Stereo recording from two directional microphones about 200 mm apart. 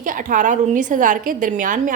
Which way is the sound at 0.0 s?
40° right (ahead or behind).